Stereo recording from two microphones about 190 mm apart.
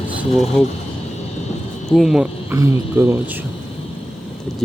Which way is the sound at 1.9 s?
Centre (ahead or behind).